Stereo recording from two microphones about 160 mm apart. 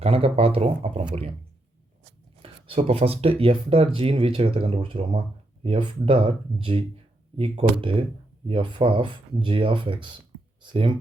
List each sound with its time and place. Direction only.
0.0 s speech: 40° right (ahead or behind)
2.4 s speech: 35° right (ahead or behind)